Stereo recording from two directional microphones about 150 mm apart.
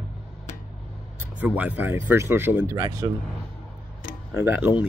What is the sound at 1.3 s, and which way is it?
Speech, 10° right (ahead or behind).